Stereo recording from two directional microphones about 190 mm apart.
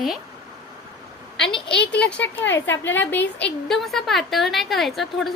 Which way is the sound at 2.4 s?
75° left (ahead or behind).